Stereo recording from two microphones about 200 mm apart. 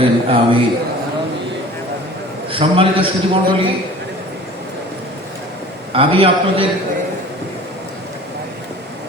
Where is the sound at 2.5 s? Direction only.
25° right (ahead or behind).